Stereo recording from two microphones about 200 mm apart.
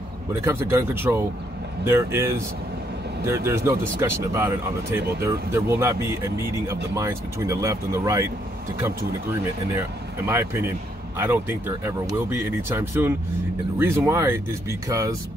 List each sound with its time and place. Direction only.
0.3 s speech: 10° right (ahead or behind)
9.8 s speech: 15° right (ahead or behind)